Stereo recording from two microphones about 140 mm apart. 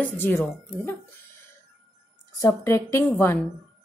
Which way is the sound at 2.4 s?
20° left (ahead or behind).